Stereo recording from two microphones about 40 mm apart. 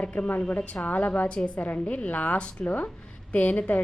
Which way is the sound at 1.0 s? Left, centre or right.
Left.